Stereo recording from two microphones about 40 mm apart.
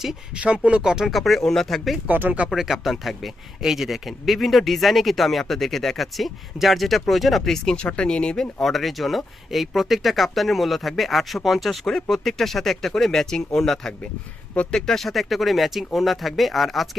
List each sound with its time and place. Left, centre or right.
0.3 s speech: right
0.8 s speech: centre
1.1 s speech: centre
2.0 s speech: right
2.5 s speech: centre
7.8 s speech: left
8.6 s speech: centre